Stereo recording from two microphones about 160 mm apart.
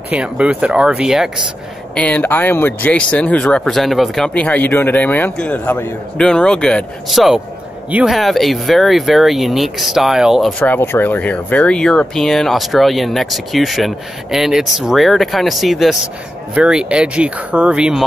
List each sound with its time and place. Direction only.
0.1 s speech: 5° right (ahead or behind)
2.0 s speech: 10° left (ahead or behind)
10.6 s speech: 10° left (ahead or behind); by 18.0 s 5° right (ahead or behind)